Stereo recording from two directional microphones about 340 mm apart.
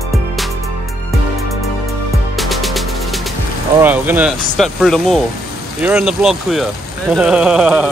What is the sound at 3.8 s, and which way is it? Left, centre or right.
Speech, centre.